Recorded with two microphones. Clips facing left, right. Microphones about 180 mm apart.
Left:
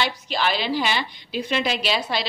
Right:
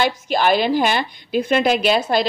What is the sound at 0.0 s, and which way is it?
A woman's voice, 50° right (ahead or behind).